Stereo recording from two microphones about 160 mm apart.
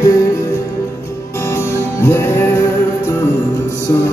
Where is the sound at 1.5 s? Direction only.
15° left (ahead or behind).